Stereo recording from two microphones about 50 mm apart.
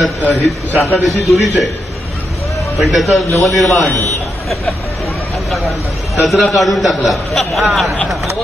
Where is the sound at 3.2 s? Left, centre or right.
Left.